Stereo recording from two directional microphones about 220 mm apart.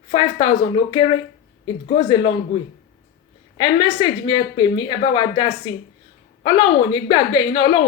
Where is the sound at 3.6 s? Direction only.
20° left (ahead or behind).